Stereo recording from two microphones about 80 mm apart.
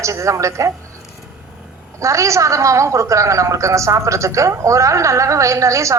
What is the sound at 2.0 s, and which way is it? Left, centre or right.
A woman's voice, right.